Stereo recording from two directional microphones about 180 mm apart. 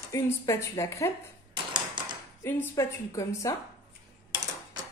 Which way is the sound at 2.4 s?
15° left (ahead or behind).